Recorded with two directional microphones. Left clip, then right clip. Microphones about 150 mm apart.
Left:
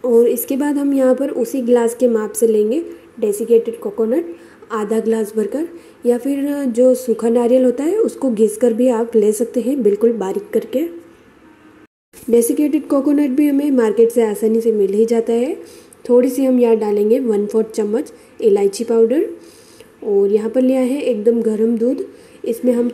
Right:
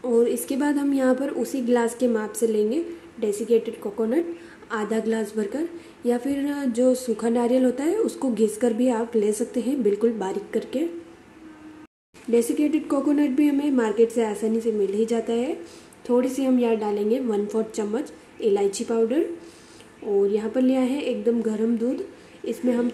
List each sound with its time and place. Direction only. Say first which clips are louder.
0.0 s a woman's voice: left 8 dB; 20° left (ahead or behind)
12.3 s a woman's voice: left 7 dB; 25° left (ahead or behind)